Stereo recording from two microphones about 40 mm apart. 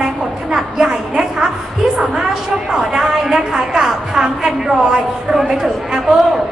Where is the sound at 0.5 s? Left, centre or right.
Centre.